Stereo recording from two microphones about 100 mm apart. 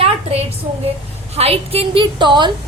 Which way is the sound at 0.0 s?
90° right.